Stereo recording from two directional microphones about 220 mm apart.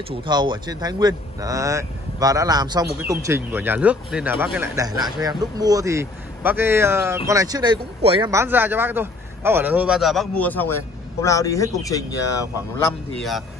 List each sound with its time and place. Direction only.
0.1 s a man's voice: 20° right (ahead or behind); by 12.9 s 15° left (ahead or behind)